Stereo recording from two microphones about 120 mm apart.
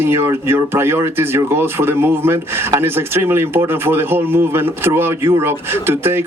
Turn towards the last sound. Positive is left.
turn(degrees=-20)  # may be behind; listen again after turning